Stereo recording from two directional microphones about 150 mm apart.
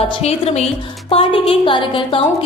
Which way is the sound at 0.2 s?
45° left (ahead or behind).